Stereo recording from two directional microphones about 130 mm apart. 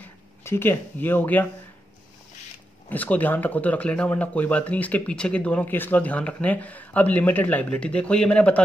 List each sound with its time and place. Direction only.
0.0 s speech: 20° left (ahead or behind)
2.9 s speech: 10° left (ahead or behind)